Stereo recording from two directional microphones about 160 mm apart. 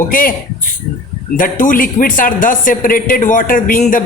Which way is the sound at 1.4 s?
55° left (ahead or behind).